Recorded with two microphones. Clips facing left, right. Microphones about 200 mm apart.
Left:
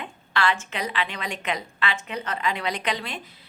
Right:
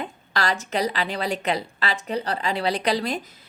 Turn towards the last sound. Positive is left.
turn(degrees=-40)  # may be behind; listen again after turning